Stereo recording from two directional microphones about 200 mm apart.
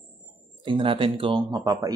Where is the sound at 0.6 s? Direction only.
25° right (ahead or behind).